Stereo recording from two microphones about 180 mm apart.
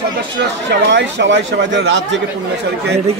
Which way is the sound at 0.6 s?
80° right.